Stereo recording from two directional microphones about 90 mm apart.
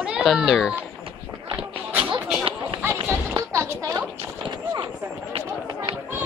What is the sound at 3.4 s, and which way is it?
Music, 35° right (ahead or behind).